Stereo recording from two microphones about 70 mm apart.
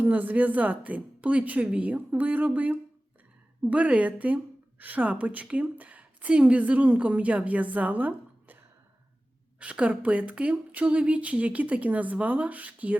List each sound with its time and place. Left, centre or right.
0.0 s a woman's voice: right
9.6 s a woman's voice: centre